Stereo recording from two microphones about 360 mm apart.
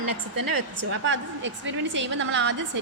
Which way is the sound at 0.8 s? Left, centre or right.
Right.